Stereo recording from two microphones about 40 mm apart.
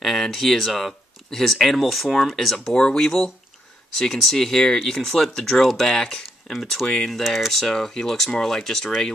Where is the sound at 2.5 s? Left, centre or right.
Centre.